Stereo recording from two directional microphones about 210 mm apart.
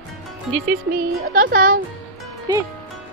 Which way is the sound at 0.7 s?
45° right (ahead or behind).